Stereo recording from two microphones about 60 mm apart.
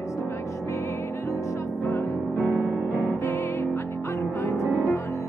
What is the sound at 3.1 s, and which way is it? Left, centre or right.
Music, left.